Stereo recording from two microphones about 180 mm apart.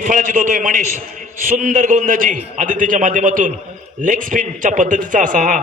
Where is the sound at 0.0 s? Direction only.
50° right (ahead or behind).